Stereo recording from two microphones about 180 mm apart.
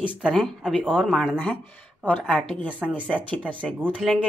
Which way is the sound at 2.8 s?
10° right (ahead or behind).